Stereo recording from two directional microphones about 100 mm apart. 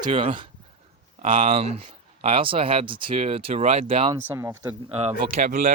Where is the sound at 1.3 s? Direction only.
90° right.